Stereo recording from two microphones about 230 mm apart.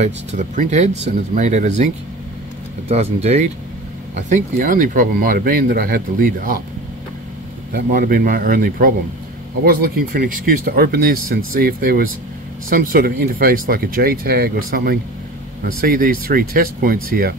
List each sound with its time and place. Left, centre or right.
0.0 s speech: right
2.9 s speech: right
7.7 s speech: right